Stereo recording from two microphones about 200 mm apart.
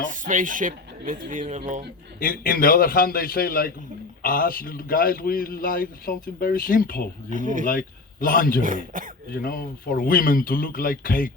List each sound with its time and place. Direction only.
0.1 s speech: 40° right (ahead or behind)
2.1 s a man's voice: 45° left (ahead or behind)
7.3 s speech: 40° right (ahead or behind)
7.7 s a man's voice: 45° left (ahead or behind)
8.6 s speech: 40° right (ahead or behind)
9.3 s a man's voice: 45° left (ahead or behind)